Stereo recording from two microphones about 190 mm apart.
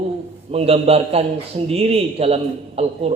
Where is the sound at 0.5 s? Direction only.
30° right (ahead or behind).